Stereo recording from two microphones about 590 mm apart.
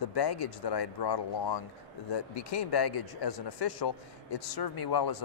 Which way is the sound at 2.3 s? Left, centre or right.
Left.